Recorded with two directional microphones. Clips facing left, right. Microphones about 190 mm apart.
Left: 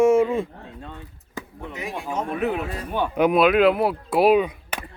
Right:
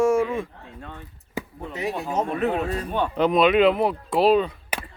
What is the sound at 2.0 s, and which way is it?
Speech, 35° right (ahead or behind).